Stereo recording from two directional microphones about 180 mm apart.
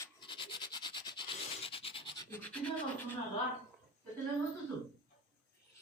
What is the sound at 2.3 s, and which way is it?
Scratch, 10° left (ahead or behind).